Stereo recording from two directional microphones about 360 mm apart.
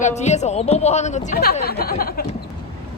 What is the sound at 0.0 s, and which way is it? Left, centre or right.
Speech, centre.